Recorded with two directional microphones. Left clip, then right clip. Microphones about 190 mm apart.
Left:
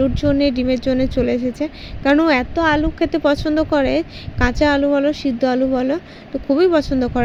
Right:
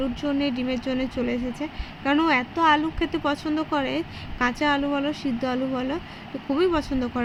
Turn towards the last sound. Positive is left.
turn(degrees=25)  # may be behind; listen again after turning